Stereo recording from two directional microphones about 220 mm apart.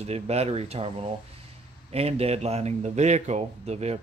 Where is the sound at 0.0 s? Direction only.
30° right (ahead or behind).